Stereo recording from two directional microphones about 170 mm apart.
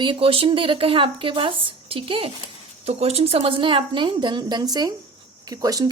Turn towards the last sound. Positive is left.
turn(degrees=-20)  # may be behind; listen again after turning